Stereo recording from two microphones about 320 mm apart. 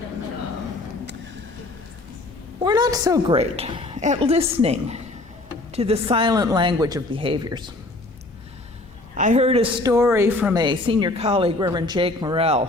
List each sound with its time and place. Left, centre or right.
2.6 s a woman's voice: centre
9.1 s a woman's voice: right